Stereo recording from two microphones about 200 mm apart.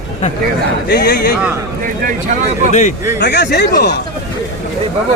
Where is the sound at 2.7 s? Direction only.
35° left (ahead or behind).